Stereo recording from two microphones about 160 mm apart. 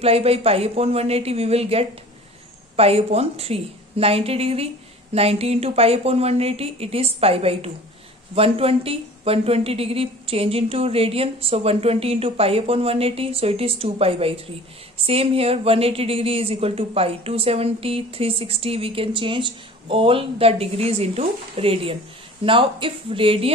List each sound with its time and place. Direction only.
0.0 s speech: 40° right (ahead or behind)